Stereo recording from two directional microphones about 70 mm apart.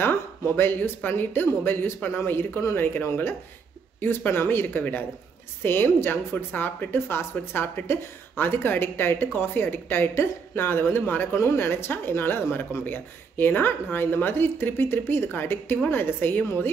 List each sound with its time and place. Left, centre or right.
0.0 s speech: left
11.3 s speech: left